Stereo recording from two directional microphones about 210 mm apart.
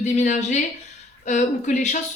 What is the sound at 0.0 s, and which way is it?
A woman's voice, 35° left (ahead or behind).